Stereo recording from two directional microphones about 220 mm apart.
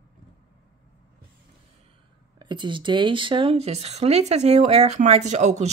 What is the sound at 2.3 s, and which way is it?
Speech, 20° right (ahead or behind).